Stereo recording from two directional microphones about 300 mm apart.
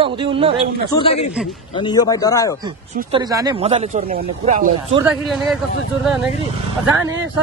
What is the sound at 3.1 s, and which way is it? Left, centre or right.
Speech, centre.